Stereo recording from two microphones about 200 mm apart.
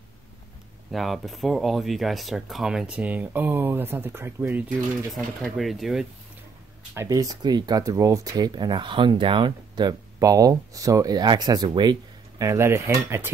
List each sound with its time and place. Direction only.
0.9 s speech: centre (ahead or behind)
6.9 s speech: 15° right (ahead or behind)